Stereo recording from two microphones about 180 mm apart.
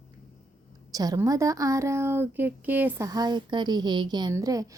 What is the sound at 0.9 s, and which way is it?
A woman's voice, 20° right (ahead or behind).